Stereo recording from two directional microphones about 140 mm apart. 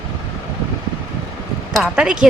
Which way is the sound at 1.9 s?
5° right (ahead or behind).